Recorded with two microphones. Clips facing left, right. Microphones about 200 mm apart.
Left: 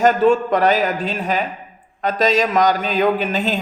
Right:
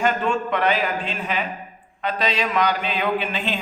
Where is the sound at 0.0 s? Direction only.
40° left (ahead or behind).